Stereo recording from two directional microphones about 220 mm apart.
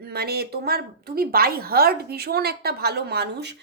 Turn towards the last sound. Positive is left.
turn(degrees=-50)  # may be behind; listen again after turning